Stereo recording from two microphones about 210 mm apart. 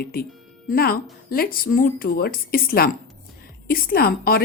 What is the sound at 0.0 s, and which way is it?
A woman's voice, 45° left (ahead or behind).